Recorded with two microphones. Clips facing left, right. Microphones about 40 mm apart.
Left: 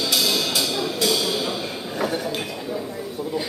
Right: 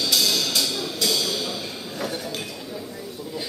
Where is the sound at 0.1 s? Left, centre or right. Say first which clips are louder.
Even; centre.